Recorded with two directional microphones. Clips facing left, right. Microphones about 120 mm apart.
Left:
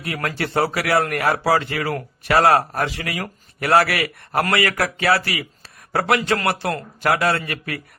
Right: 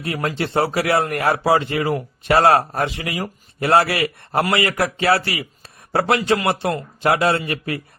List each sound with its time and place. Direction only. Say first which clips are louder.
0.0 s a man's voice: right 2 dB; 25° right (ahead or behind)